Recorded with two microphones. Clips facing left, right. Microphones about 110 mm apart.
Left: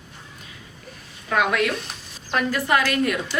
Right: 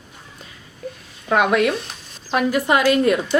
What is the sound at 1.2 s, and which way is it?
A woman's voice, 25° right (ahead or behind).